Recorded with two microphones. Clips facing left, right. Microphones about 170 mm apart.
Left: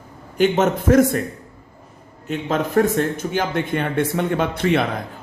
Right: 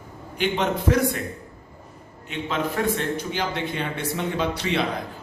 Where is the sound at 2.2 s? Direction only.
45° left (ahead or behind).